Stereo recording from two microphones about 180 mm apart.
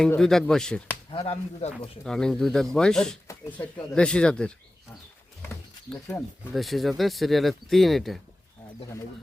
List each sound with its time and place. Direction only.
0.0 s speech: 5° left (ahead or behind)
1.1 s speech: 35° left (ahead or behind)
2.0 s speech: 5° left (ahead or behind)
5.4 s a sound: 10° left (ahead or behind)
6.5 s speech: centre (ahead or behind)